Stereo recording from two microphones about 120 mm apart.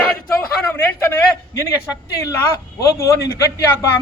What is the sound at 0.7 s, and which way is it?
Speech, 15° left (ahead or behind).